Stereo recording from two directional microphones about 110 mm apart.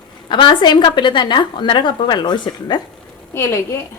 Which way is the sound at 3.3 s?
25° left (ahead or behind).